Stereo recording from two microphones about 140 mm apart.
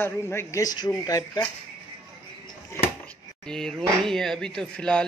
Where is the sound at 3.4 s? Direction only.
5° left (ahead or behind).